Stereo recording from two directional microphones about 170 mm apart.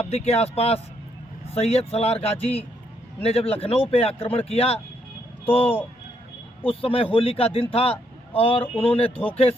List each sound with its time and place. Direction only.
0.0 s a man's voice: 40° left (ahead or behind)